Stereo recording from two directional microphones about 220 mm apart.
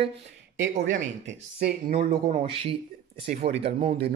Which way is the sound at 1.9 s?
35° right (ahead or behind).